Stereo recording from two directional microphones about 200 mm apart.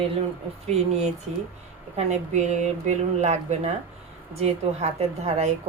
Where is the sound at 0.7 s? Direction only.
30° right (ahead or behind).